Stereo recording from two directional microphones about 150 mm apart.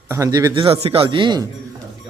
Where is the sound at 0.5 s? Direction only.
40° right (ahead or behind).